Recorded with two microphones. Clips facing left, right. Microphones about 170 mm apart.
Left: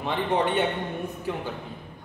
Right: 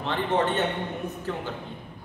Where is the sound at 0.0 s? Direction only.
10° left (ahead or behind).